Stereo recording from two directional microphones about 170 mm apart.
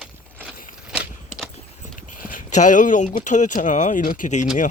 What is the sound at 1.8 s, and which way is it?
Speech, 50° left (ahead or behind).